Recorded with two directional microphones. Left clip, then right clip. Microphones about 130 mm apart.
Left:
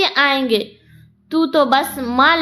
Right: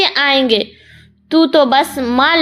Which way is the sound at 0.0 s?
35° right (ahead or behind).